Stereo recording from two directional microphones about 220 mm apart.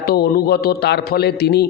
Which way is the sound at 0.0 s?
45° left (ahead or behind).